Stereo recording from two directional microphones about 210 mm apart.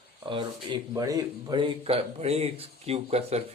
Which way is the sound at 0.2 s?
25° right (ahead or behind).